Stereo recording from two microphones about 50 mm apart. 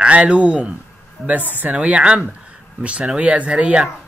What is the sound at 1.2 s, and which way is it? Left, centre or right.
Speech, right.